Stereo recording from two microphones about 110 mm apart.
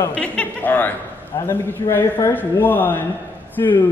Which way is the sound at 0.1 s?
10° left (ahead or behind).